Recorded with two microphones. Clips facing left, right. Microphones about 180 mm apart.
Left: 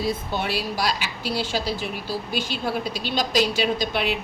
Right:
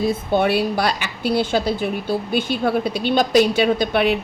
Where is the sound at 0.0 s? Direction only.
55° right (ahead or behind).